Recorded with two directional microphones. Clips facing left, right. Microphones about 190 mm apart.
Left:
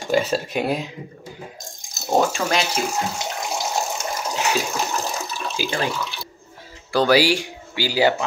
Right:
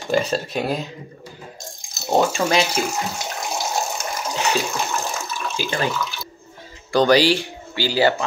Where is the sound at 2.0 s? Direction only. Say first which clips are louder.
Right 1 dB; centre (ahead or behind).